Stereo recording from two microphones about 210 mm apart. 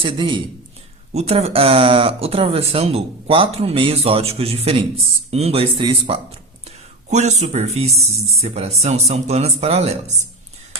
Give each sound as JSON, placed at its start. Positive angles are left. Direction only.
{"t": 0.0, "sound": "speech", "side_deg": -25}